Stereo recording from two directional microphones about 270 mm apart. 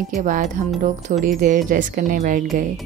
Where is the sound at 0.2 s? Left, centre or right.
Right.